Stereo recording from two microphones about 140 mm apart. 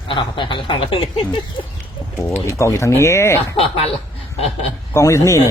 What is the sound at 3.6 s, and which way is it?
Snicker, 45° left (ahead or behind).